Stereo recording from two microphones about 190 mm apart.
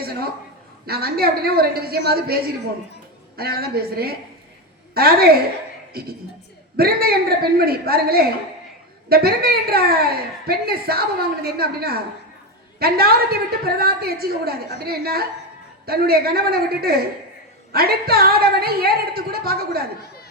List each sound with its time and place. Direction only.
0.9 s a woman's voice: 55° right (ahead or behind)
6.7 s a woman's voice: 55° right (ahead or behind)